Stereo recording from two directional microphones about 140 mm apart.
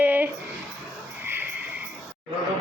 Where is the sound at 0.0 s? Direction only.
10° right (ahead or behind).